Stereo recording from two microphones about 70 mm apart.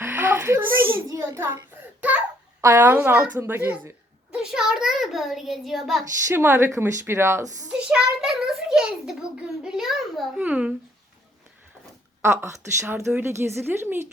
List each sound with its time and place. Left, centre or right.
0.0 s a sound: right
1.0 s a child's voice: right
1.7 s a sound: right
2.6 s speech: right
4.5 s a child's voice: centre
6.2 s speech: right
6.7 s a child's voice: right
7.1 s speech: right
7.7 s a child's voice: centre
10.3 s a child's voice: centre
12.2 s a child's voice: right